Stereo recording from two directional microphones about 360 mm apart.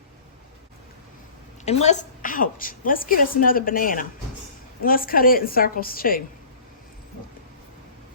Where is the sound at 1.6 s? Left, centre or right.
Centre.